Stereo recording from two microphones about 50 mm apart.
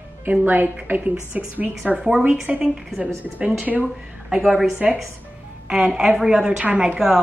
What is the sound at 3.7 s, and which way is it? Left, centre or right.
A woman's voice, centre.